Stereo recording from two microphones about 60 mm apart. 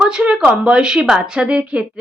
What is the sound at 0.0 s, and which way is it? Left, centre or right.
A woman's voice, centre.